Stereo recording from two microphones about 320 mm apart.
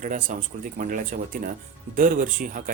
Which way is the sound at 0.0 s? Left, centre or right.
Right.